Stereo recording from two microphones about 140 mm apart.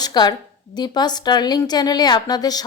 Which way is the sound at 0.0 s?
30° left (ahead or behind).